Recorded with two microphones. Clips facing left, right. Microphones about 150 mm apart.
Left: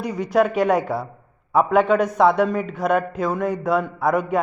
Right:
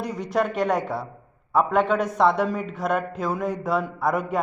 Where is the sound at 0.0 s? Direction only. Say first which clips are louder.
Left 5 dB; centre (ahead or behind).